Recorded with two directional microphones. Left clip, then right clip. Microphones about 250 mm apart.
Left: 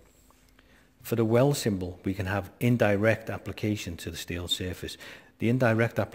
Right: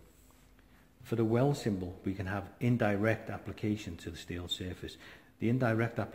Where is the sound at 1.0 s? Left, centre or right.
Left.